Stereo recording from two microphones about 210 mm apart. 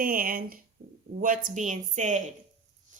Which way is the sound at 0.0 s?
45° right (ahead or behind).